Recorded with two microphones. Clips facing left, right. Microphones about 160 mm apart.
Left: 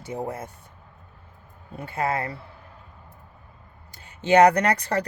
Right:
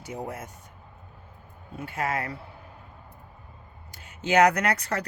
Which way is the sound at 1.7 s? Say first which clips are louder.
Left 3 dB; 30° left (ahead or behind).